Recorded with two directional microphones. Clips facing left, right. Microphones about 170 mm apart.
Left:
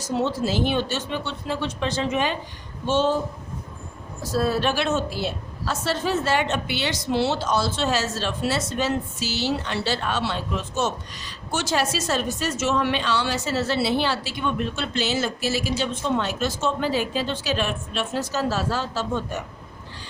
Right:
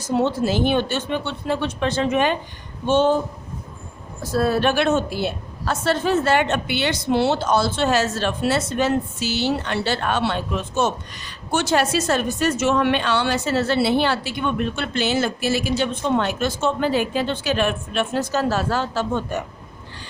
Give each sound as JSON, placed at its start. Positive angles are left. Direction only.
{"t": 0.1, "sound": "a woman's voice", "side_deg": -55}
{"t": 4.3, "sound": "a woman's voice", "side_deg": -55}